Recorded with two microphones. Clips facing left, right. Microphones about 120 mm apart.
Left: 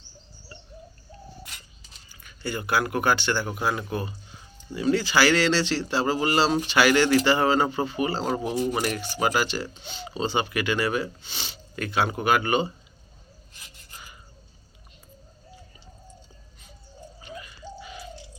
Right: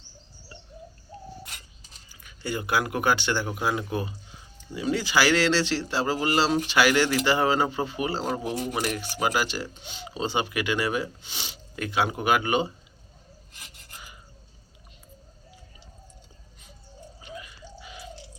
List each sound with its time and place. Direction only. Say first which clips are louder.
2.2 s speech: even; 15° right (ahead or behind)
3.6 s speech: even; 5° right (ahead or behind)
17.2 s a sound: even; 10° right (ahead or behind)